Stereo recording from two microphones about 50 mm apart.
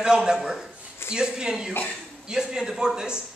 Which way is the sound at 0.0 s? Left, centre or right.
Centre.